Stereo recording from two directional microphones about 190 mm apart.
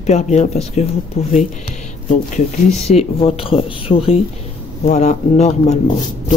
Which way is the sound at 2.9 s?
30° left (ahead or behind).